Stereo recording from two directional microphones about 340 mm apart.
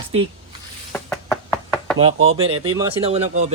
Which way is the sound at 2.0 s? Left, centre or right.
Centre.